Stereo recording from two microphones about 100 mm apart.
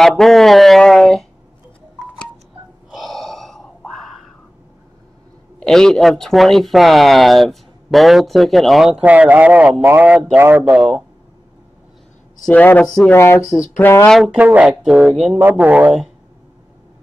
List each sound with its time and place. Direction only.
0.1 s speech: 5° left (ahead or behind)
2.9 s grunt: centre (ahead or behind)
5.6 s speech: 5° left (ahead or behind)
9.0 s speech: 15° right (ahead or behind)
12.4 s speech: 15° left (ahead or behind)
12.8 s speech: 5° left (ahead or behind)
13.1 s speech: 25° left (ahead or behind)
14.2 s speech: 15° right (ahead or behind)